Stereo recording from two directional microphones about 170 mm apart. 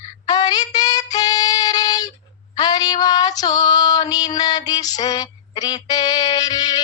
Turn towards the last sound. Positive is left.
turn(degrees=25)  # may be behind; listen again after turning